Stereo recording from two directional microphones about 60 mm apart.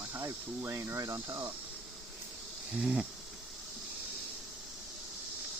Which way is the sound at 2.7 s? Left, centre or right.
Centre.